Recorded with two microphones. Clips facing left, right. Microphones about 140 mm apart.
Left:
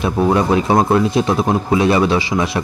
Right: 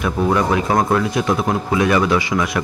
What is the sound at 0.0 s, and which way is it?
Speech, 25° left (ahead or behind).